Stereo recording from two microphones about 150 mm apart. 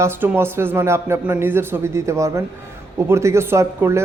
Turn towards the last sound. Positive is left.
turn(degrees=-15)  # may be behind; listen again after turning